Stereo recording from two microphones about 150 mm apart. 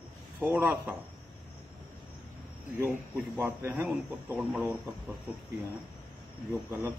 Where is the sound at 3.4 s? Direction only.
15° right (ahead or behind).